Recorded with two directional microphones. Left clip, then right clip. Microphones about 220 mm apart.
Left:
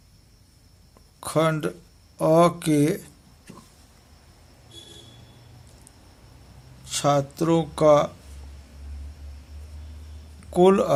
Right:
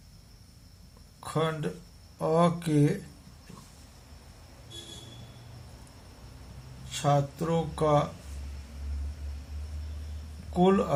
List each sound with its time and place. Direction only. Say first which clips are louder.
1.2 s speech: left 8 dB; 55° left (ahead or behind)
6.9 s speech: left 5 dB; 55° left (ahead or behind)
10.5 s speech: left 7 dB; 55° left (ahead or behind)